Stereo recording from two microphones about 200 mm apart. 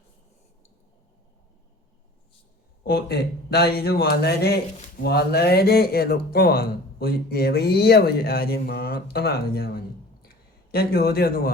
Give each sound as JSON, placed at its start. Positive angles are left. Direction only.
{"t": 2.8, "sound": "speech", "side_deg": 50}